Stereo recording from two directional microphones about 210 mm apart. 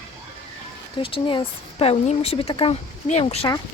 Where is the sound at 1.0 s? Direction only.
25° left (ahead or behind).